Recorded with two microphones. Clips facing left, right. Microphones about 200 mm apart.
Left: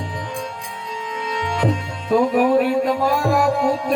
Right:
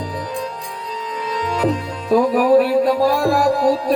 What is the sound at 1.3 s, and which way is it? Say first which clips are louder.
Music: right 2 dB; 35° right (ahead or behind).